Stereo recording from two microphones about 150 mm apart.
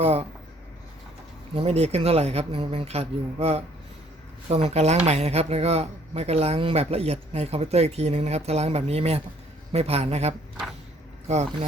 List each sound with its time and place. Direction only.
0.0 s speech: 45° right (ahead or behind)
1.5 s speech: 45° right (ahead or behind)